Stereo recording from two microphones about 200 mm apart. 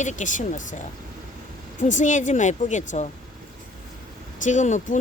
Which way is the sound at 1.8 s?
40° left (ahead or behind).